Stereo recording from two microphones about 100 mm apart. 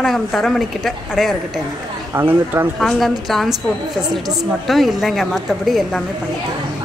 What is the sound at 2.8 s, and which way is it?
Speech, centre (ahead or behind).